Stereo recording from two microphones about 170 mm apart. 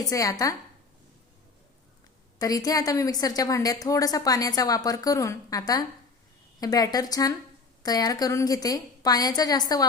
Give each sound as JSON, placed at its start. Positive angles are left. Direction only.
{"t": 0.0, "sound": "a woman's voice", "side_deg": 20}
{"t": 2.4, "sound": "a woman's voice", "side_deg": 20}